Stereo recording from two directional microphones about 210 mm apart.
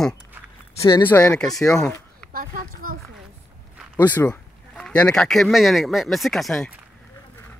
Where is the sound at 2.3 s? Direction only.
45° right (ahead or behind).